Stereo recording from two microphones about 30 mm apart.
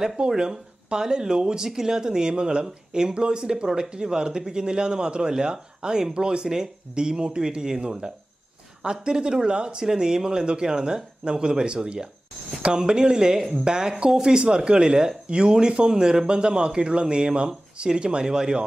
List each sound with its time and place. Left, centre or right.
0.2 s speech: right
1.7 s speech: centre
8.8 s speech: right
9.8 s speech: centre
14.4 s speech: right